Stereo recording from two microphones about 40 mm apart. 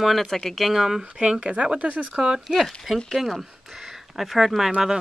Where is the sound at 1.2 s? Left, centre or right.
Right.